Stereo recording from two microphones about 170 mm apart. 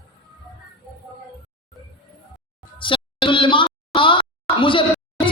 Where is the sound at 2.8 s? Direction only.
30° left (ahead or behind).